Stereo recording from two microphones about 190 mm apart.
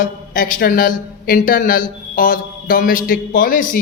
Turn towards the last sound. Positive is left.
turn(degrees=45)  # may be behind; listen again after turning